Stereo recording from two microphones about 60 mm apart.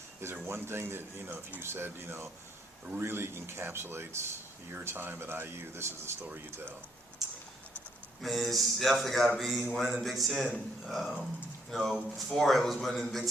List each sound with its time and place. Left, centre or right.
0.4 s speech: right
8.2 s a man's voice: centre